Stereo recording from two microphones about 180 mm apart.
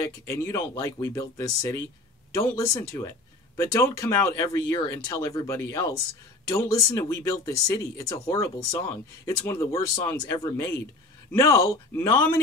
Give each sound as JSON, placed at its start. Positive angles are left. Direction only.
{"t": 0.3, "sound": "speech", "side_deg": 20}